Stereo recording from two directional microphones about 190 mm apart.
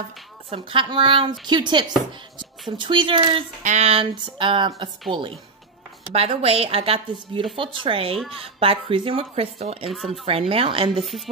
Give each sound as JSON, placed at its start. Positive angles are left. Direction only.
{"t": 0.5, "sound": "speech", "side_deg": -25}